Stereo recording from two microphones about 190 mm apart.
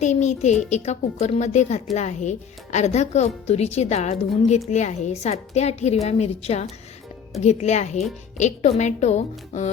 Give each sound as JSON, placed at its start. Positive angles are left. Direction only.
{"t": 0.0, "sound": "a woman's voice", "side_deg": 40}